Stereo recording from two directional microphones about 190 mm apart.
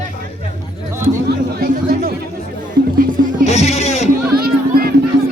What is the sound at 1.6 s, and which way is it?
Chatter, 55° right (ahead or behind).